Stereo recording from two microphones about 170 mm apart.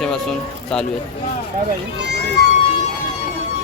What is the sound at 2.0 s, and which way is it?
Run, 90° right.